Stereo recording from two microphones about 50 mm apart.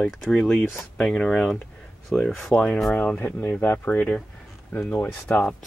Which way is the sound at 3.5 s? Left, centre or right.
Left.